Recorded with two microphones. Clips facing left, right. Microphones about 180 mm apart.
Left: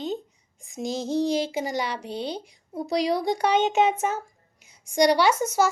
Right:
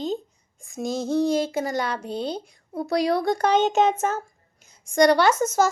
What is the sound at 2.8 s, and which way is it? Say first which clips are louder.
Speech: right 2 dB; 15° left (ahead or behind).